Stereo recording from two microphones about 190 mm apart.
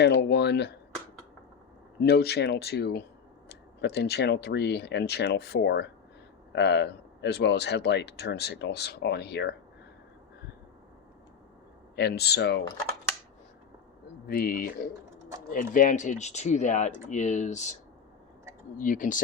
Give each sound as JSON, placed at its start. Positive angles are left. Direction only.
{"t": 0.0, "sound": "speech", "side_deg": 60}
{"t": 2.0, "sound": "speech", "side_deg": 60}
{"t": 11.9, "sound": "speech", "side_deg": 60}
{"t": 14.3, "sound": "speech", "side_deg": 50}
{"t": 18.8, "sound": "speech", "side_deg": 45}